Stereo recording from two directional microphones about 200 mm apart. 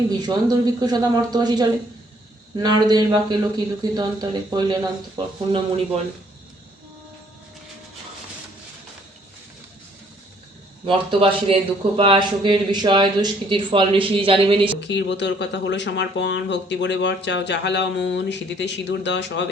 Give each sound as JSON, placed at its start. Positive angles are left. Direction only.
{"t": 0.2, "sound": "speech", "side_deg": -20}
{"t": 10.8, "sound": "speech", "side_deg": -25}
{"t": 14.8, "sound": "speech", "side_deg": 60}